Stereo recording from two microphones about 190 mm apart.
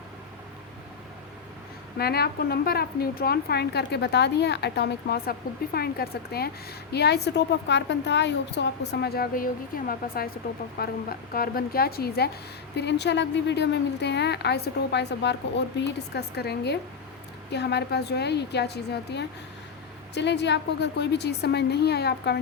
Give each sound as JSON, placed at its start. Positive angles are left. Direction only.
{"t": 2.0, "sound": "a woman's voice", "side_deg": 55}